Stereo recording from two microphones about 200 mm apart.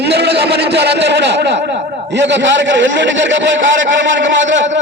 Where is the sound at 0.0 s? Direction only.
55° right (ahead or behind).